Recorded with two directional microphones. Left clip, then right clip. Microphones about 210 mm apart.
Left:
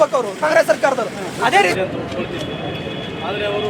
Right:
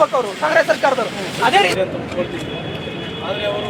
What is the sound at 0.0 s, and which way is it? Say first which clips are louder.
Speech: even; 20° left (ahead or behind).